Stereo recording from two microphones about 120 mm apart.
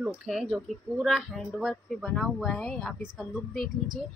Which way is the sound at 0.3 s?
Centre (ahead or behind).